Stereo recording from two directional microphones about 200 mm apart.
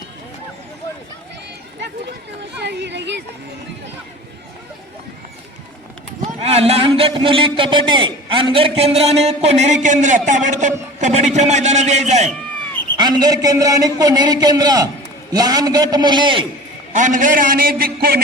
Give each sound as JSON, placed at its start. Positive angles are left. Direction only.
{"t": 2.6, "sound": "a sound", "side_deg": -55}
{"t": 6.4, "sound": "a man's voice", "side_deg": -30}
{"t": 13.0, "sound": "a man's voice", "side_deg": -20}
{"t": 16.9, "sound": "a man's voice", "side_deg": -40}